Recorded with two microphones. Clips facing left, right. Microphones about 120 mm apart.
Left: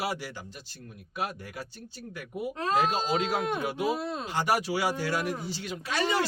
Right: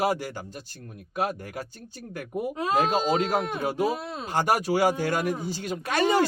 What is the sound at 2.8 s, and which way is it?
Speech, 45° right (ahead or behind).